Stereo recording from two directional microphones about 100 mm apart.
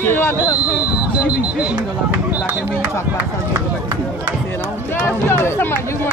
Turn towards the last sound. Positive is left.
turn(degrees=20)  # may be behind; listen again after turning